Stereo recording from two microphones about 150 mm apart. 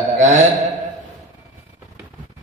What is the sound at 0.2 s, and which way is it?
Mantra, 50° right (ahead or behind).